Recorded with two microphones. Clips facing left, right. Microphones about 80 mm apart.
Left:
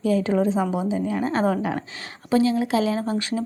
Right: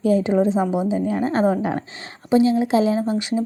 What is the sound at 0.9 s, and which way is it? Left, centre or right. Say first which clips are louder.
A woman's voice: right 3 dB; right.